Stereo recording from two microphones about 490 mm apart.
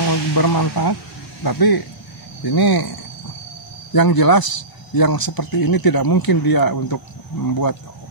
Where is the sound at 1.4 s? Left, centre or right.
Left.